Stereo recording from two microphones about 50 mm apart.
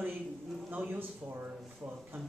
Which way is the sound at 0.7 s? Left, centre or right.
Right.